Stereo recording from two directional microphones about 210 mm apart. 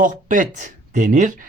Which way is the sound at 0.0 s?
40° right (ahead or behind).